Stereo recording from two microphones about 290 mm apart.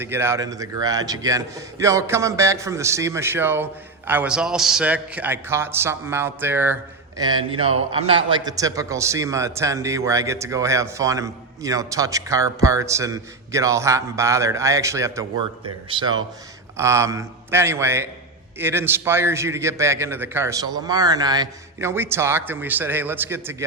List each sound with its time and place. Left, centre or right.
0.0 s a man's voice: centre